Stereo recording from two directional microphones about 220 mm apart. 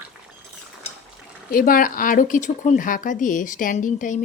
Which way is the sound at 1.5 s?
40° left (ahead or behind).